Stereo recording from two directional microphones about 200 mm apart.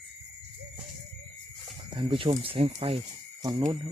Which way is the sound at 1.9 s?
25° right (ahead or behind).